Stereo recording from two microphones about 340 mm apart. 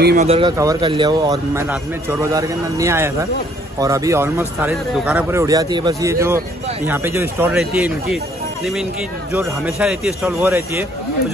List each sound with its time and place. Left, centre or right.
0.0 s speech: right; by 8.2 s centre
9.3 s speech: centre